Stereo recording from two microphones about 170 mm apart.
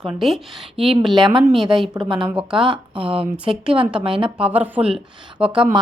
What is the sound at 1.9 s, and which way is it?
A woman's voice, 25° right (ahead or behind).